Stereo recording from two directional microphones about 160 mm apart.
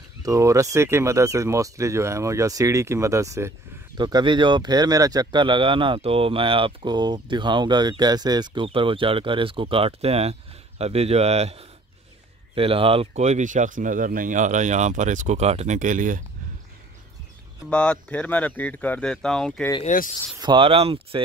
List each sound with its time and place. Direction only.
0.2 s speech: 20° right (ahead or behind); by 16.2 s 55° right (ahead or behind)
17.6 s speech: 5° left (ahead or behind)
19.8 s speech: 55° left (ahead or behind)
20.3 s speech: 30° right (ahead or behind)